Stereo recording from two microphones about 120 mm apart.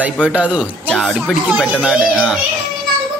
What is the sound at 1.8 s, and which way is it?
Speech, 10° right (ahead or behind).